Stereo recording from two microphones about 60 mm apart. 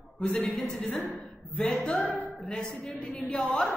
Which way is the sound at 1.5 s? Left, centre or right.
Centre.